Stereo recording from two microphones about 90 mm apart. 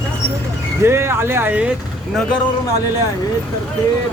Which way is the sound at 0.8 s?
25° right (ahead or behind).